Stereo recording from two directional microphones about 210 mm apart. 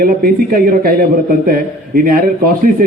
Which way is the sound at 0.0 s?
45° right (ahead or behind).